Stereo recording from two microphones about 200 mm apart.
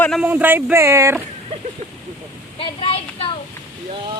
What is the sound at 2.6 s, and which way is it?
Speech, 30° left (ahead or behind).